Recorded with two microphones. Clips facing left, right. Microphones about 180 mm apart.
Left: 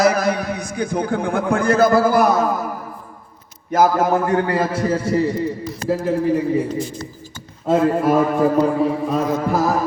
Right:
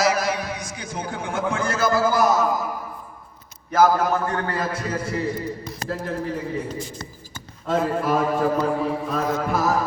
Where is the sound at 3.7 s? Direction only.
20° left (ahead or behind).